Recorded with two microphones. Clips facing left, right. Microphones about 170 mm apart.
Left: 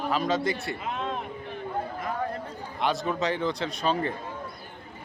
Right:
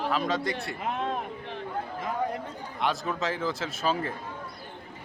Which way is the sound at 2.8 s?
Centre (ahead or behind).